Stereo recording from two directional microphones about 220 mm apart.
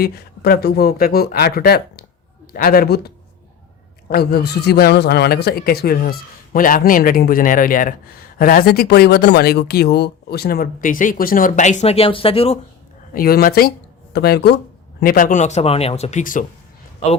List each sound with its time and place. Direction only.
0.0 s a man's voice: 45° left (ahead or behind)
4.1 s a man's voice: 45° left (ahead or behind); by 12.5 s 25° left (ahead or behind)
13.1 s speech: 45° left (ahead or behind)